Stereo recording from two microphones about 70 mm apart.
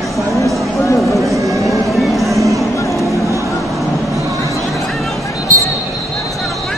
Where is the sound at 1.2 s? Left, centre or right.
Right.